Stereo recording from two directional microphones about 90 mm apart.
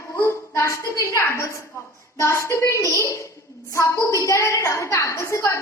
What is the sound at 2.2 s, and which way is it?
Speech, 35° left (ahead or behind).